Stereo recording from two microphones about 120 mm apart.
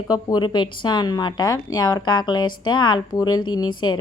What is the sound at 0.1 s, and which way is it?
A woman's voice, 35° left (ahead or behind).